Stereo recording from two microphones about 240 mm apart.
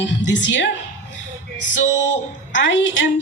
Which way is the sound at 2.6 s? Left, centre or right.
Left.